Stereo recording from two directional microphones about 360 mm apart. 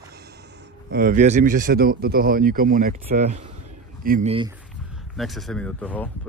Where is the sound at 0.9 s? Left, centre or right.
Right.